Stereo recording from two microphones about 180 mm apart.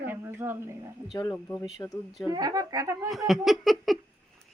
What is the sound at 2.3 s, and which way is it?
Speech, 20° right (ahead or behind).